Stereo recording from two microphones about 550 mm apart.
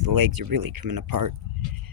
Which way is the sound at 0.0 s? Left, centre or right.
Right.